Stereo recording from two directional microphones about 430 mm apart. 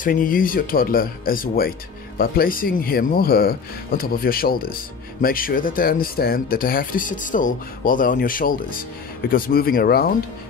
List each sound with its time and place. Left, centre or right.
0.0 s speech: centre